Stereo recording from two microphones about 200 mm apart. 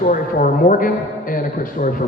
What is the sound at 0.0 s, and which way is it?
A man's voice, 40° left (ahead or behind).